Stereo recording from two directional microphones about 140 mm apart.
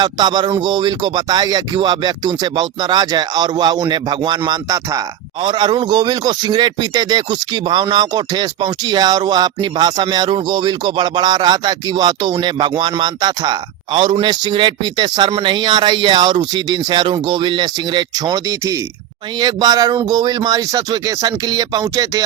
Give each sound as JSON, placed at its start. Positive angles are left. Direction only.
{"t": 0.0, "sound": "speech", "side_deg": -30}